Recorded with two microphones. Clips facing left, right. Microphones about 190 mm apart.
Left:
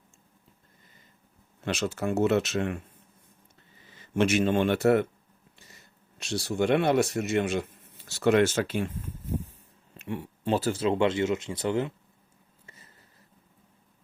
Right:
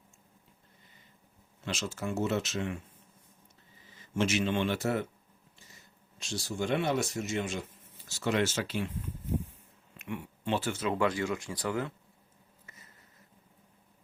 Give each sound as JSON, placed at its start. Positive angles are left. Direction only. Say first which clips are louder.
{"t": 1.6, "sound": "speech", "louder": "left 6 dB", "side_deg": 60}
{"t": 3.9, "sound": "speech", "louder": "left 5 dB", "side_deg": 60}
{"t": 6.1, "sound": "speech", "louder": "left 7 dB", "side_deg": 65}
{"t": 10.0, "sound": "speech", "louder": "left 4 dB", "side_deg": 35}
{"t": 12.6, "sound": "a sound", "louder": "left 3 dB", "side_deg": 30}